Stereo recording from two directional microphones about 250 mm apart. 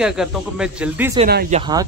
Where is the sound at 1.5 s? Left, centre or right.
Centre.